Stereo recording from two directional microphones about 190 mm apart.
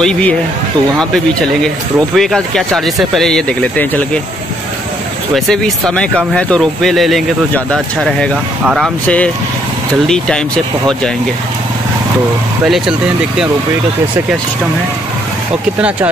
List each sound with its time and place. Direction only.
0.0 s speech: 5° left (ahead or behind)
2.1 s speech: centre (ahead or behind)
5.3 s speech: 5° left (ahead or behind)
12.6 s speech: centre (ahead or behind)